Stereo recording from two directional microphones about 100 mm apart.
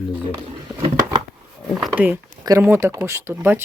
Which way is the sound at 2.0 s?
15° right (ahead or behind).